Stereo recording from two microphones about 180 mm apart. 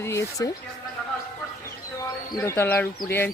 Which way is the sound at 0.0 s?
15° left (ahead or behind).